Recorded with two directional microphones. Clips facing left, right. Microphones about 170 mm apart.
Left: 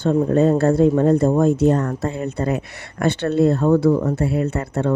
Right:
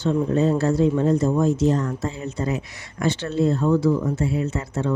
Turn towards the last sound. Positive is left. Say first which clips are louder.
# left 4 dB
turn(degrees=60)  # may be behind; listen again after turning